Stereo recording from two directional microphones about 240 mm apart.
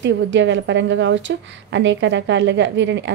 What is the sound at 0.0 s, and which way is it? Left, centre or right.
A woman's voice, right.